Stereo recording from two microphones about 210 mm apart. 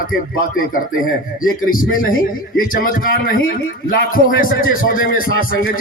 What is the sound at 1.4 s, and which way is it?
A man's voice, 40° left (ahead or behind).